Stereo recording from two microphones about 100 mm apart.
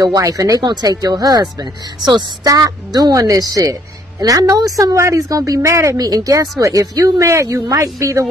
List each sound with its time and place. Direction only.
0.0 s speech: 35° right (ahead or behind)